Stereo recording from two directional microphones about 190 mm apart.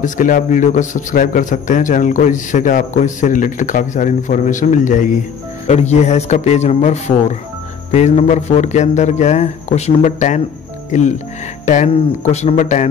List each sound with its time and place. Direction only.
0.0 s a man's voice: 45° left (ahead or behind)